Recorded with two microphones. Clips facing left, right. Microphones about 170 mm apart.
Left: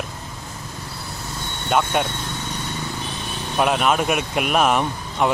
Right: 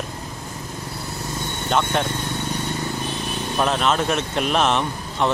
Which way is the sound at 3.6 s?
10° left (ahead or behind).